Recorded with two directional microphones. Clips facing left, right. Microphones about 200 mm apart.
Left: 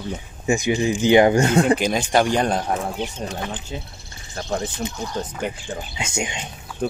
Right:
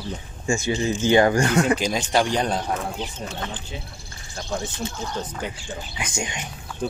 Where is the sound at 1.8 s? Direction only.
55° left (ahead or behind).